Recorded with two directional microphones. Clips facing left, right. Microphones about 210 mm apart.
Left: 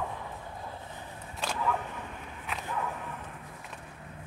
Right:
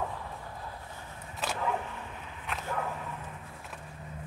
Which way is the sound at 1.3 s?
5° right (ahead or behind).